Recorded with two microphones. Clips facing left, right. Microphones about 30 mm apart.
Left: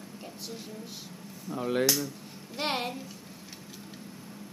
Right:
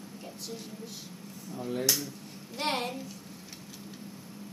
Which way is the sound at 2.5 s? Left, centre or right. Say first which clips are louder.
Even; centre.